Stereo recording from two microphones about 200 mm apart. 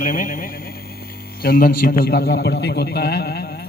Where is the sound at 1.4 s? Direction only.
45° left (ahead or behind).